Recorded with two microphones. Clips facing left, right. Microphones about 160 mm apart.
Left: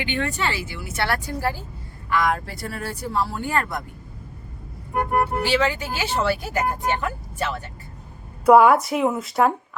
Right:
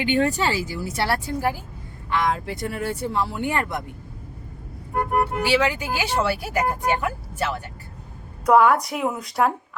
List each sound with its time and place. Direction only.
0.0 s speech: 40° right (ahead or behind); by 3.8 s 20° right (ahead or behind)
5.5 s speech: 10° right (ahead or behind)
8.4 s a woman's voice: 5° left (ahead or behind)